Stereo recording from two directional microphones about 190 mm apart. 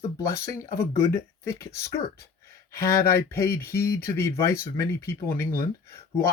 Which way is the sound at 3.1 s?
15° left (ahead or behind).